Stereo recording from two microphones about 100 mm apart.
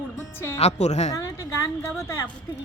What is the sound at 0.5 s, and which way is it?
Speech, 90° left.